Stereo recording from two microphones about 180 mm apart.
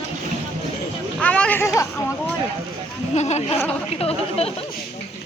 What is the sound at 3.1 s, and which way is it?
Speech, 40° left (ahead or behind).